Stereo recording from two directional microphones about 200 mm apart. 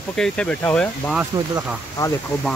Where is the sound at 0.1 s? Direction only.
5° left (ahead or behind).